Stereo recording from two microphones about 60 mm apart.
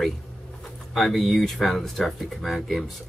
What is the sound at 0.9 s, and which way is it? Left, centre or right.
Speech, centre.